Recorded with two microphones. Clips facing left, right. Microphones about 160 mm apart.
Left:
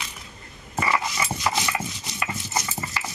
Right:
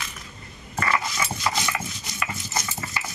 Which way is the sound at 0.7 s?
10° left (ahead or behind).